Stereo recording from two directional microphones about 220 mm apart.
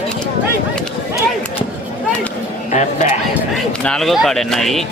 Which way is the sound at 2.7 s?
30° left (ahead or behind).